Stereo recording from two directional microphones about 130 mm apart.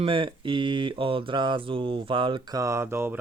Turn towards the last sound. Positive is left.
turn(degrees=-15)  # may be behind; listen again after turning